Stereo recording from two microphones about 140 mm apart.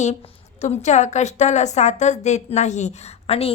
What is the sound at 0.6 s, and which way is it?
A woman's voice, 55° left (ahead or behind).